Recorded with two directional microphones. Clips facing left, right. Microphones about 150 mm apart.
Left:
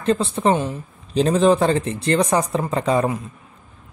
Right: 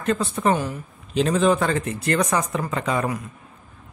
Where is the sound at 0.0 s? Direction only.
30° left (ahead or behind).